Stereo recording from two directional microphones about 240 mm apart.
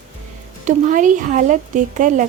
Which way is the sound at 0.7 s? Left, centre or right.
Right.